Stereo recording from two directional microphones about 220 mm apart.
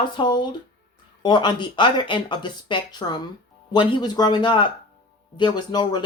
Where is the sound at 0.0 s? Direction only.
20° left (ahead or behind).